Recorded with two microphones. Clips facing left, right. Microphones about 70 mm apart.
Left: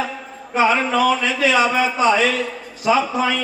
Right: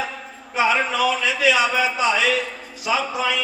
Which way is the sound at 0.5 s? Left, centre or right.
Left.